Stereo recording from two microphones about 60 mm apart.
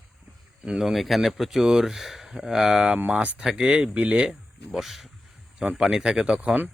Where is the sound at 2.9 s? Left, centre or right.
Right.